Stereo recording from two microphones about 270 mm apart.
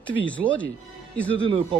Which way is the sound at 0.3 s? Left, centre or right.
Centre.